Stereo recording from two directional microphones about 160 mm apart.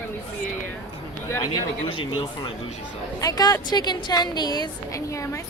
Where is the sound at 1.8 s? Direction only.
35° left (ahead or behind).